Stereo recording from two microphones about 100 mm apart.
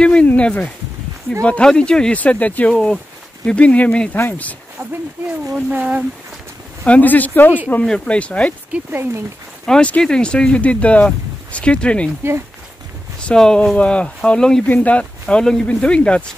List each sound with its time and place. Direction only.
0.0 s a sound: 10° left (ahead or behind)
1.4 s speech: 10° left (ahead or behind)
5.7 s speech: 15° right (ahead or behind)
6.8 s speech: 15° left (ahead or behind)
7.8 s speech: 5° left (ahead or behind)
8.7 s speech: 20° right (ahead or behind)
9.7 s speech: 10° left (ahead or behind)
12.2 s speech: 25° right (ahead or behind)
13.2 s speech: 10° left (ahead or behind)